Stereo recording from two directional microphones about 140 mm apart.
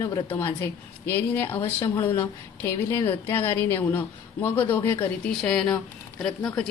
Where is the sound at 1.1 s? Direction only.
15° left (ahead or behind).